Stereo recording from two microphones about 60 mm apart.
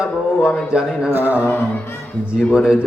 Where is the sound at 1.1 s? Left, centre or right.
Right.